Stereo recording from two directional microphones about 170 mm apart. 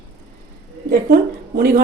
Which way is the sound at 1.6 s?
60° right (ahead or behind).